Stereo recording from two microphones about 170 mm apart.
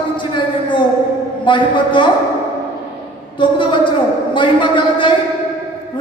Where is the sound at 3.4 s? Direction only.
30° left (ahead or behind).